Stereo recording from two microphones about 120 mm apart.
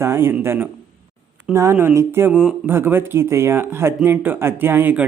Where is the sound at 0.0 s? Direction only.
20° right (ahead or behind).